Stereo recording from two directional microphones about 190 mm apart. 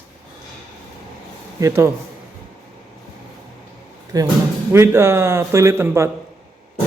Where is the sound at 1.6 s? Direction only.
15° right (ahead or behind).